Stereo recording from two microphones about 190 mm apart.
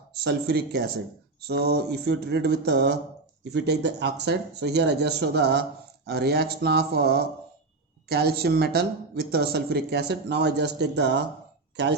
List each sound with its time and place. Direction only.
0.2 s speech: 60° right (ahead or behind)